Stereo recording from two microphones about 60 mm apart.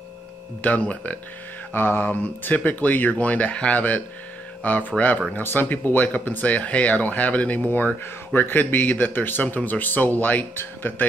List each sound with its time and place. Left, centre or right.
0.6 s speech: left
1.7 s speech: left